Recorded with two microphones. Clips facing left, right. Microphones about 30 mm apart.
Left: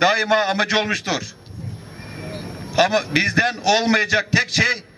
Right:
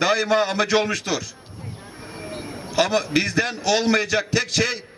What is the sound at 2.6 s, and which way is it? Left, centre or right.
A man's voice, centre.